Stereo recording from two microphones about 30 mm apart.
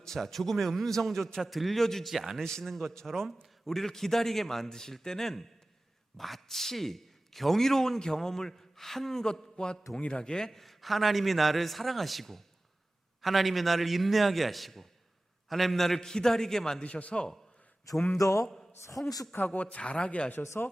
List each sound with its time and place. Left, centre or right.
0.0 s a man's voice: centre
2.0 s a man's voice: centre
2.4 s a man's voice: centre
9.2 s a sound: left
10.5 s a man's voice: centre
16.0 s a man's voice: left
16.8 s a man's voice: left
19.0 s a man's voice: centre
19.5 s a man's voice: left
20.6 s speech: left